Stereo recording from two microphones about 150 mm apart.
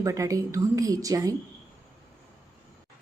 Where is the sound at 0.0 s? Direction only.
20° right (ahead or behind).